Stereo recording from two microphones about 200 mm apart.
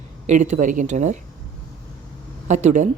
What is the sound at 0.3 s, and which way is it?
Speech, 35° right (ahead or behind).